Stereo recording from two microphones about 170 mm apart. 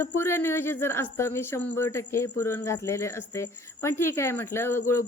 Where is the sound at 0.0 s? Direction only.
15° left (ahead or behind).